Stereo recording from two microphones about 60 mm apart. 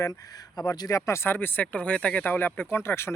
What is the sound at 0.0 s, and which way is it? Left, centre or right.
Speech, left.